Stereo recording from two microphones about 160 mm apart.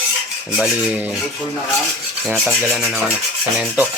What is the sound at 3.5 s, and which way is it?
Speech, 10° right (ahead or behind).